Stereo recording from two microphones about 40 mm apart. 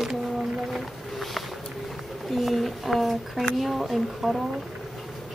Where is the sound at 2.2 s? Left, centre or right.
Centre.